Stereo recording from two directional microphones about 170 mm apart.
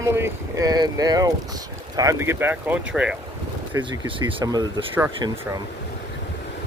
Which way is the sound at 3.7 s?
20° right (ahead or behind).